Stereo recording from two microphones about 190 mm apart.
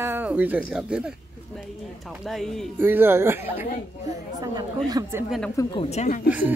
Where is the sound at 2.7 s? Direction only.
10° right (ahead or behind).